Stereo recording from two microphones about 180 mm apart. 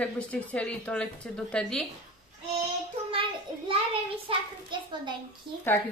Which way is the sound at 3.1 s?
30° right (ahead or behind).